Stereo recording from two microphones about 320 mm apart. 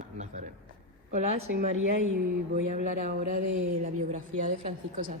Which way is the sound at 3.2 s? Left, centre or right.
Right.